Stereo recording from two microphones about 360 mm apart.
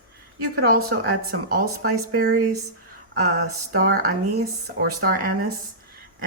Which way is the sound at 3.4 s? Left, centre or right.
Right.